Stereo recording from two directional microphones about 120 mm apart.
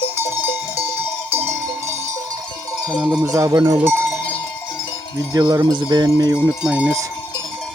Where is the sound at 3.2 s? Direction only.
25° right (ahead or behind).